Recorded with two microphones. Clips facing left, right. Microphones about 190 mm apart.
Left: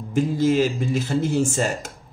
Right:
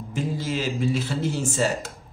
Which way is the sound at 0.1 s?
50° left (ahead or behind).